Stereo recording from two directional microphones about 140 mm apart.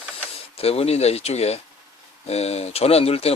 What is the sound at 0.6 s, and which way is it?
Speech, 45° left (ahead or behind).